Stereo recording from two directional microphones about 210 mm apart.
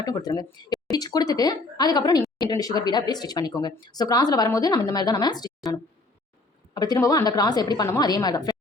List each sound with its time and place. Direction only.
0.0 s a woman's voice: 20° left (ahead or behind)
6.7 s a woman's voice: 20° left (ahead or behind)